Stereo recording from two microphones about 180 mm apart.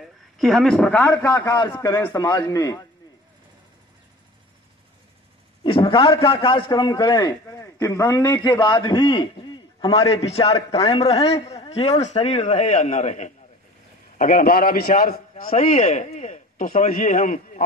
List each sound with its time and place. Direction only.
0.0 s speech: centre (ahead or behind)
1.1 s a man's voice: 20° left (ahead or behind)
5.6 s a man's voice: 30° left (ahead or behind)
11.2 s a man's voice: 35° left (ahead or behind); by 15.5 s 50° left (ahead or behind)
15.5 s a man's voice: 35° left (ahead or behind)